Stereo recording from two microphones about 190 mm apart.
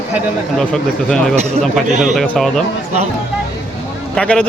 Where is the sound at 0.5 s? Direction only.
5° left (ahead or behind).